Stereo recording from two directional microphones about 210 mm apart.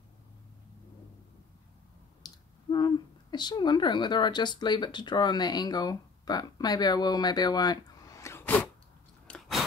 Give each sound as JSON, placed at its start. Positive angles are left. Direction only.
{"t": 2.2, "sound": "speech", "side_deg": 20}
{"t": 9.3, "sound": "chewing", "side_deg": 5}